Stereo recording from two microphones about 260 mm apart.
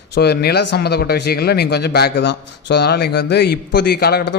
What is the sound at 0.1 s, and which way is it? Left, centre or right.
A man's voice, left.